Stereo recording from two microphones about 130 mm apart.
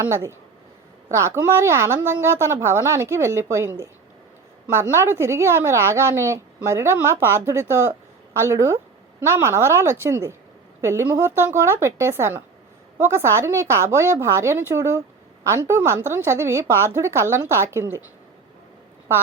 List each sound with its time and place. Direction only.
0.1 s a woman's voice: 20° right (ahead or behind)